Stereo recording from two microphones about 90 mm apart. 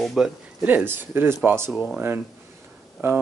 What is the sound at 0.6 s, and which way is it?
Speech, 20° right (ahead or behind).